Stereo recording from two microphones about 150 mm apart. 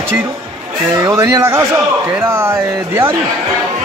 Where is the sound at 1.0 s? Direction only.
25° right (ahead or behind).